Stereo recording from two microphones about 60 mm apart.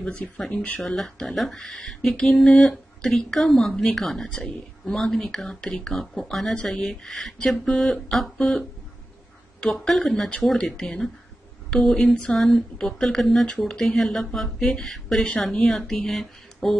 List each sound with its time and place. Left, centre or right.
0.5 s speech: left
0.7 s speech: centre
13.5 s speech: centre